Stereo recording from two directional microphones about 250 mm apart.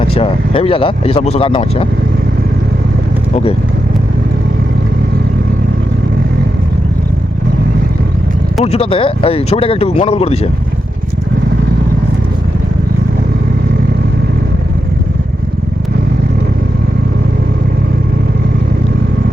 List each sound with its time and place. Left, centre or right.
0.1 s speech: left
8.6 s speech: left